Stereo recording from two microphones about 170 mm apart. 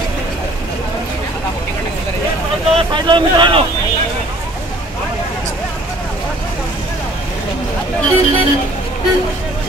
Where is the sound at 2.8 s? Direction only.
30° right (ahead or behind).